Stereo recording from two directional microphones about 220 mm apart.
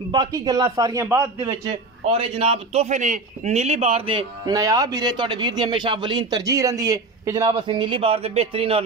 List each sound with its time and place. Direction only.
0.1 s a man's voice: 15° right (ahead or behind)
1.4 s a man's voice: 25° right (ahead or behind)